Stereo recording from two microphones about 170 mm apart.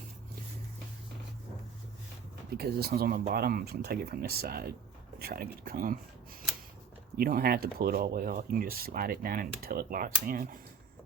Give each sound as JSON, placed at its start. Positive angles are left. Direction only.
{"t": 2.5, "sound": "speech", "side_deg": -65}
{"t": 7.2, "sound": "speech", "side_deg": -60}